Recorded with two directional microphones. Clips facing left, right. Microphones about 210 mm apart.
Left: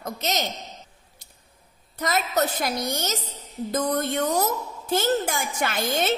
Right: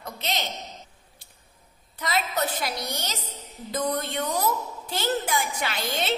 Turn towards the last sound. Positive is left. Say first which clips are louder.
# left 4 dB
turn(degrees=45)  # may be behind; listen again after turning